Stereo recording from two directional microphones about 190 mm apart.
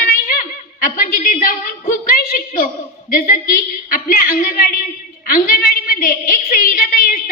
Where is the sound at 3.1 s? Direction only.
50° left (ahead or behind).